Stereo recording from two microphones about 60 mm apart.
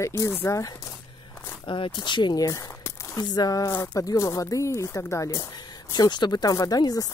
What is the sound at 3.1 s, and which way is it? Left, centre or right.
Speech, left.